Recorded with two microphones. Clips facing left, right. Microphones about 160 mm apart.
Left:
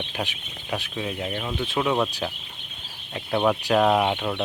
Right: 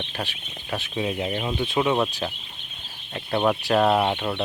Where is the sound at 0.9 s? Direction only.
15° right (ahead or behind).